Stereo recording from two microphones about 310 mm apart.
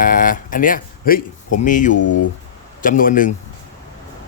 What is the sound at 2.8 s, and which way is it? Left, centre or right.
Speech, left.